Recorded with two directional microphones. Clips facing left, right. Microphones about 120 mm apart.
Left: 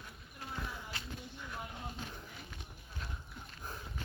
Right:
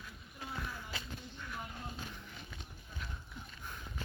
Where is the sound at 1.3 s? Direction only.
15° left (ahead or behind).